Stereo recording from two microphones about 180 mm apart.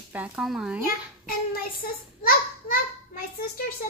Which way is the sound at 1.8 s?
55° left (ahead or behind).